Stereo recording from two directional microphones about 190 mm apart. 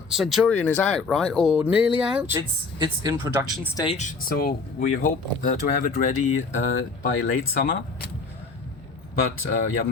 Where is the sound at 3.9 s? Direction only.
45° left (ahead or behind).